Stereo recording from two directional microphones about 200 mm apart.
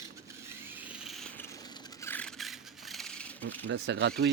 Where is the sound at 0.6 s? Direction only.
10° right (ahead or behind).